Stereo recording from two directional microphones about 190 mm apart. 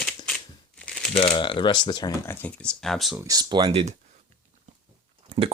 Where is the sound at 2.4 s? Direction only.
5° left (ahead or behind).